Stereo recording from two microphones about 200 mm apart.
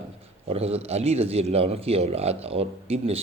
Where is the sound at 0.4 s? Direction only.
30° right (ahead or behind).